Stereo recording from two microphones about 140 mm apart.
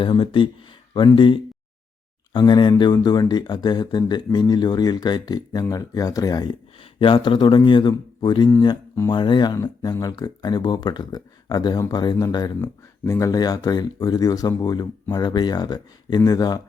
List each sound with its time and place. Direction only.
0.0 s speech: 35° left (ahead or behind)